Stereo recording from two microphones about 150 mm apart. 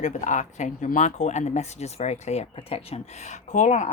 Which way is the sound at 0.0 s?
55° left (ahead or behind).